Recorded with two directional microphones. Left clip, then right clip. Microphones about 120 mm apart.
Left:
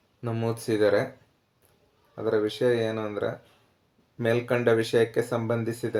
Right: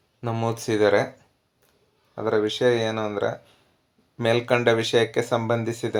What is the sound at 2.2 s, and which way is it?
Speech, 20° right (ahead or behind).